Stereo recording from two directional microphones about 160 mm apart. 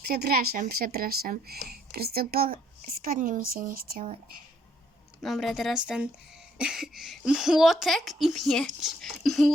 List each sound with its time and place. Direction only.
0.1 s speech: 75° right (ahead or behind)
5.2 s a woman's voice: centre (ahead or behind)